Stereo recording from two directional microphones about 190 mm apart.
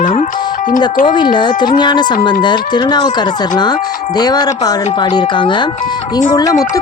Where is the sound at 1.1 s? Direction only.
25° left (ahead or behind).